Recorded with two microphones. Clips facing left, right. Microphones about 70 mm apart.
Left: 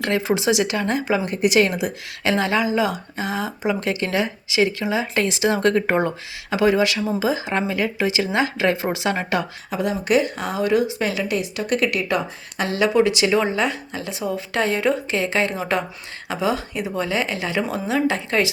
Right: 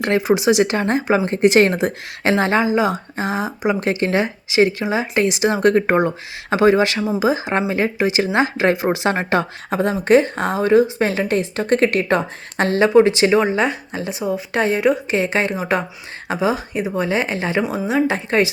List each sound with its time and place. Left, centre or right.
0.0 s speech: right
7.0 s speech: centre
9.0 s speech: right
10.7 s speech: right
12.9 s speech: right